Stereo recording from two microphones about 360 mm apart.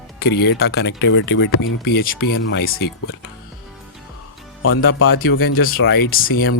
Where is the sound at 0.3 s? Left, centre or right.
Left.